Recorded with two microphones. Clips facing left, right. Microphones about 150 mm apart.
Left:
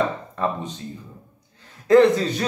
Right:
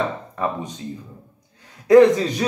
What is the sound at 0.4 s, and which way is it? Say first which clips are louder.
Speech: even; 15° right (ahead or behind).